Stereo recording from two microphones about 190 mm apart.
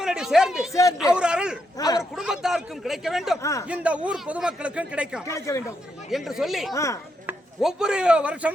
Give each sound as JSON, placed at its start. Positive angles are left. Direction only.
{"t": 0.0, "sound": "speech", "side_deg": -5}
{"t": 0.7, "sound": "speech", "side_deg": 15}
{"t": 0.9, "sound": "speech", "side_deg": -5}
{"t": 3.4, "sound": "speech", "side_deg": 15}
{"t": 3.7, "sound": "speech", "side_deg": -5}
{"t": 5.2, "sound": "speech", "side_deg": 15}
{"t": 6.1, "sound": "speech", "side_deg": 0}
{"t": 6.7, "sound": "speech", "side_deg": 15}
{"t": 7.3, "sound": "chopping", "side_deg": -5}